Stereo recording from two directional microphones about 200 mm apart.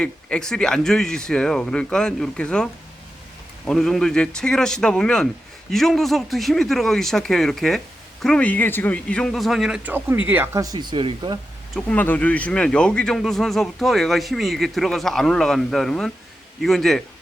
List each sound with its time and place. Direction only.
0.0 s speech: 5° left (ahead or behind)
3.7 s speech: centre (ahead or behind); by 11.3 s 25° right (ahead or behind)
11.7 s speech: 5° left (ahead or behind)